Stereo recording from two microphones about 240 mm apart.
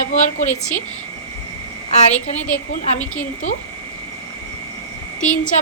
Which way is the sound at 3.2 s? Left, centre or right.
Left.